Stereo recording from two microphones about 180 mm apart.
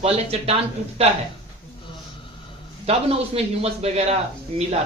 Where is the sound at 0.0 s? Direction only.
35° right (ahead or behind).